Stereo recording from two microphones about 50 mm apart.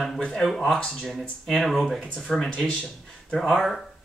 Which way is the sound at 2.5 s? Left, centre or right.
Left.